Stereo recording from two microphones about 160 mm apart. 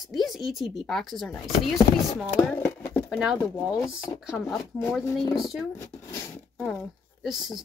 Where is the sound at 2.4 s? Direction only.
10° left (ahead or behind).